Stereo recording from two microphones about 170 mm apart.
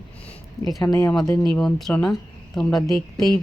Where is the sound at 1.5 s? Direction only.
Centre (ahead or behind).